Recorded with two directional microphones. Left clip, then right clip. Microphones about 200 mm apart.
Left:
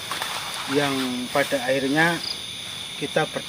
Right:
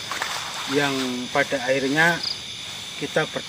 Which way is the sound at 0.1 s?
5° right (ahead or behind).